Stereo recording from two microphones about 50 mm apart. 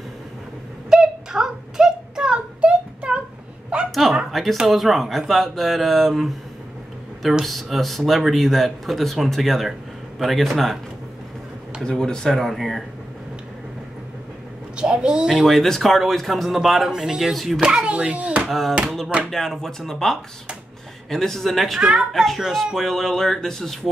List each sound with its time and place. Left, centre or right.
0.8 s a sound: centre
3.9 s a sound: centre
4.6 s speech: centre
7.4 s speech: centre
11.8 s speech: centre
14.8 s speech: centre
15.4 s speech: centre
17.3 s speech: centre
17.6 s speech: centre
18.5 s speech: centre
21.7 s speech: centre
22.1 s speech: centre